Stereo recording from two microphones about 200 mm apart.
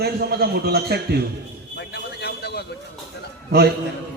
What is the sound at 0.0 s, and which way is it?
Speech, 50° right (ahead or behind).